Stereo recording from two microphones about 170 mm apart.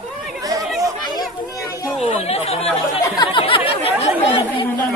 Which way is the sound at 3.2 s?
30° left (ahead or behind).